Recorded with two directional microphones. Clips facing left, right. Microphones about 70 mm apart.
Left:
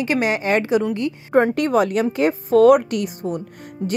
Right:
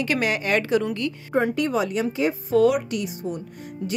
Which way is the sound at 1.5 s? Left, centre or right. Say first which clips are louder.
Left 5 dB; left.